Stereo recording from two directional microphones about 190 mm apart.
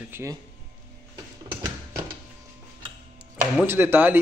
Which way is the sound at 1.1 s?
20° right (ahead or behind).